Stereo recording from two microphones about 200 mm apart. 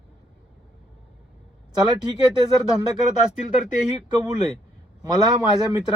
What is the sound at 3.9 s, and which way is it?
Speech, 20° right (ahead or behind).